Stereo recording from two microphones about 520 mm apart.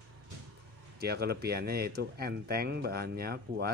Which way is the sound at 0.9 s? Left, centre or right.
Centre.